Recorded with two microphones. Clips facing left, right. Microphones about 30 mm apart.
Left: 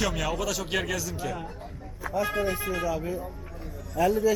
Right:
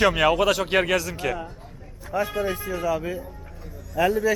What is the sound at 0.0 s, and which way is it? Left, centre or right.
A man's voice, right.